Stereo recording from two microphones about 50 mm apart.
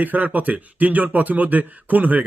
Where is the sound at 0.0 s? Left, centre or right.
Right.